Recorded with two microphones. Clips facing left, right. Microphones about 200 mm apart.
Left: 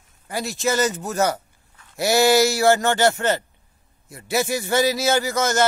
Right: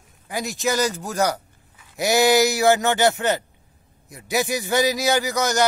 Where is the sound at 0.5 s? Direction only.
Centre (ahead or behind).